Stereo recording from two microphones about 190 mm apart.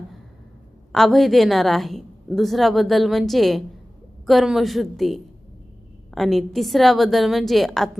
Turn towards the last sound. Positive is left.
turn(degrees=0)  # may be behind; listen again after turning